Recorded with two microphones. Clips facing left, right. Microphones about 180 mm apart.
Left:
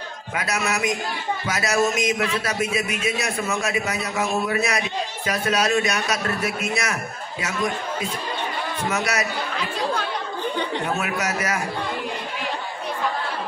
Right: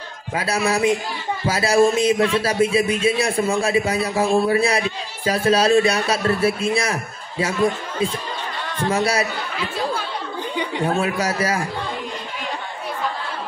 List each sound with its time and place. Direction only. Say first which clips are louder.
0.4 s a man's voice: right 5 dB; 30° right (ahead or behind)
10.5 s a sound: right 1 dB; 10° right (ahead or behind)
10.9 s a man's voice: right 4 dB; 30° right (ahead or behind)